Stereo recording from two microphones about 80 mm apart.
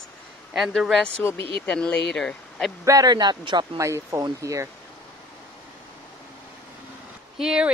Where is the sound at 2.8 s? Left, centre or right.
Right.